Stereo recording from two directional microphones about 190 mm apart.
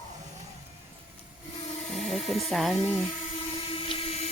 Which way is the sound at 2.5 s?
Centre (ahead or behind).